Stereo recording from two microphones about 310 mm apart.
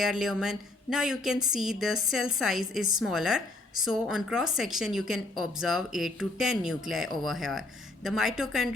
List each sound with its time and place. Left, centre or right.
0.0 s speech: centre